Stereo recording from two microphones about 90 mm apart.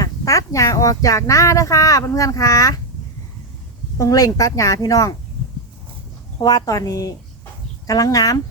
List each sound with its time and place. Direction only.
0.0 s speech: 40° left (ahead or behind)
3.9 s speech: 40° left (ahead or behind)
6.4 s speech: 40° left (ahead or behind)